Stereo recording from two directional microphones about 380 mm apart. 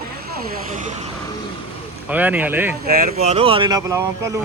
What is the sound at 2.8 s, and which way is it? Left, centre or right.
Speech, right.